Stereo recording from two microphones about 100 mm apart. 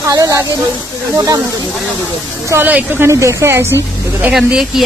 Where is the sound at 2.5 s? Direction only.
20° right (ahead or behind).